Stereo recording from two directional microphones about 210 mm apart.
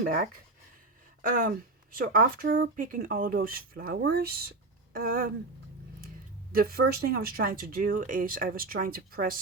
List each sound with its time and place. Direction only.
0.0 s speech: 40° right (ahead or behind)
6.5 s speech: 45° right (ahead or behind)